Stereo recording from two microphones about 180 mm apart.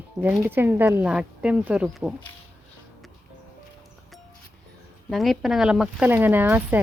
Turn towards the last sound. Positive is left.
turn(degrees=-10)  # may be behind; listen again after turning